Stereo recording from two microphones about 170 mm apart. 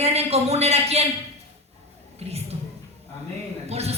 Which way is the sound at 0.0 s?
40° right (ahead or behind).